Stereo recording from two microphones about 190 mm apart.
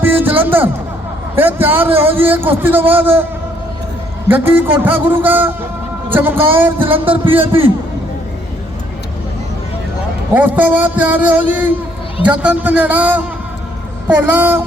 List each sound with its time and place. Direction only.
0.0 s a sound: 10° right (ahead or behind)
1.4 s a man's voice: 10° right (ahead or behind)
4.3 s a man's voice: 10° right (ahead or behind)
7.1 s a man's voice: 30° right (ahead or behind)
10.3 s a man's voice: 10° right (ahead or behind)